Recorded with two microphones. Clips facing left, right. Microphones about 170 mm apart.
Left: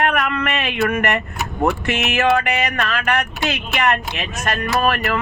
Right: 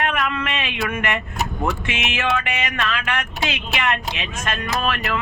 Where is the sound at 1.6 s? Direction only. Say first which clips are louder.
Left 8 dB; 45° left (ahead or behind).